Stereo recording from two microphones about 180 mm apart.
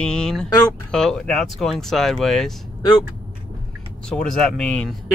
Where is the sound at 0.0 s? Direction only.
5° left (ahead or behind).